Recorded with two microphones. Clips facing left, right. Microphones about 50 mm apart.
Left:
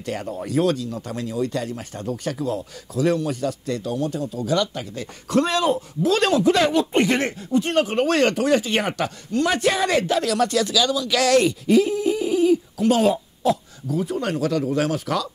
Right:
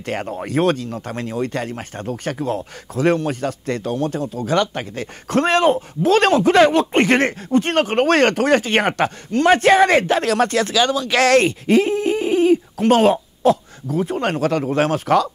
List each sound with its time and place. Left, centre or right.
0.0 s speech: right